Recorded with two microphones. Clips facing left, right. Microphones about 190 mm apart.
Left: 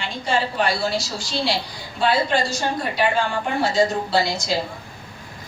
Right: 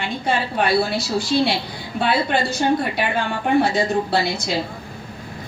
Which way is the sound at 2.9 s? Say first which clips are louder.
Left 2 dB; 60° right (ahead or behind).